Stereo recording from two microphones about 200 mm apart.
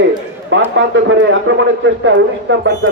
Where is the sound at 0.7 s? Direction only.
70° right (ahead or behind).